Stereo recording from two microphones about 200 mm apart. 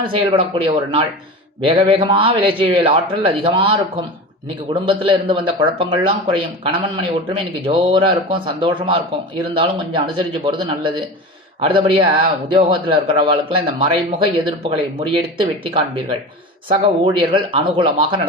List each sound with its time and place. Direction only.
0.0 s speech: 25° right (ahead or behind)